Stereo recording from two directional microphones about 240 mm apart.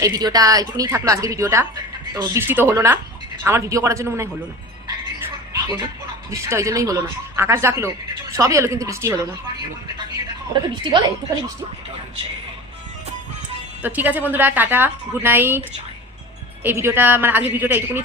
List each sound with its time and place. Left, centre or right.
0.0 s speech: centre
6.3 s speech: centre
10.5 s a woman's voice: centre
13.8 s speech: centre
16.6 s speech: centre